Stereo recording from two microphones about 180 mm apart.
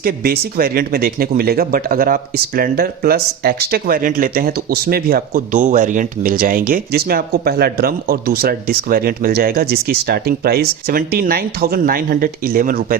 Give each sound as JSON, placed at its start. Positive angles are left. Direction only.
{"t": 0.0, "sound": "speech", "side_deg": -55}